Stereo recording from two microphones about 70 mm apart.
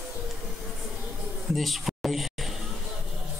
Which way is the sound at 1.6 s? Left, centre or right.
Centre.